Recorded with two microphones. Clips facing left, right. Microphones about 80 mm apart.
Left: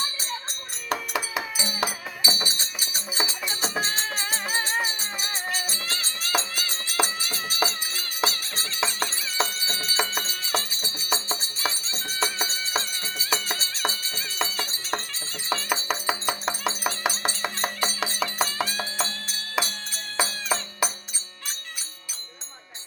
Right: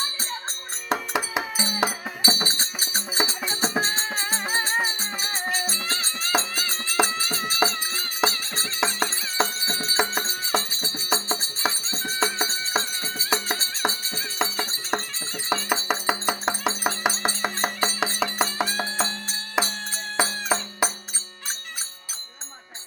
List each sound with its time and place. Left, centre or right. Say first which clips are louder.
0.9 s music: right 2 dB; right
1.5 s music: right 3 dB; right